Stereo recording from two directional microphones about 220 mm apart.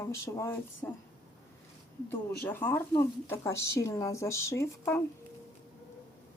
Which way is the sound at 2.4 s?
10° left (ahead or behind).